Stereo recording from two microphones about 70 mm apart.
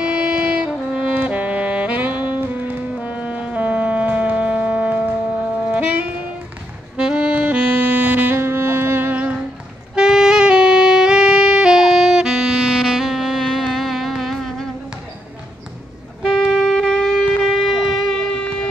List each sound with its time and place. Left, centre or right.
0.0 s saxophone: centre
5.7 s music: right
7.0 s saxophone: centre
9.9 s saxophone: centre
16.4 s saxophone: centre
16.7 s wind instrument: centre
18.4 s music: centre